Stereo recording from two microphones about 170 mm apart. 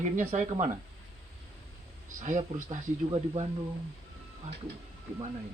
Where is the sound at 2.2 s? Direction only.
45° right (ahead or behind).